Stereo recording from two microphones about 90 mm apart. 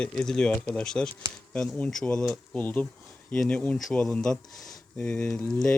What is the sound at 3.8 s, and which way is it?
Speech, 5° left (ahead or behind).